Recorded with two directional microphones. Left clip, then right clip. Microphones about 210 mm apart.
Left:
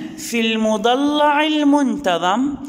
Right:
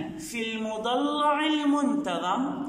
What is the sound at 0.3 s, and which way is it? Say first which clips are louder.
A man's voice: left 14 dB; 50° left (ahead or behind).